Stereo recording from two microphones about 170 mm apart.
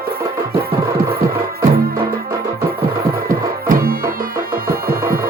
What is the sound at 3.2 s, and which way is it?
Music, 55° right (ahead or behind).